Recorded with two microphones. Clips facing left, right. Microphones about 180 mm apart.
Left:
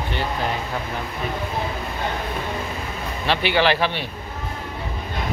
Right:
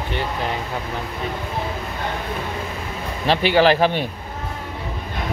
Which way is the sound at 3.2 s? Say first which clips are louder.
Right 4 dB; 40° right (ahead or behind).